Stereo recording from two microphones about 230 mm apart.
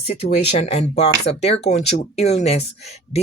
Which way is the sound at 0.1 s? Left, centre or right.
Left.